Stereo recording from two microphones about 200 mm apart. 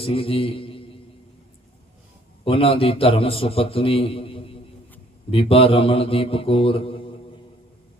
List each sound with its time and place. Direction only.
0.0 s a man's voice: 30° left (ahead or behind)
2.4 s a man's voice: 30° left (ahead or behind)